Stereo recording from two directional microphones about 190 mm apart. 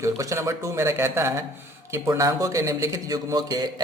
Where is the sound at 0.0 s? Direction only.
15° right (ahead or behind).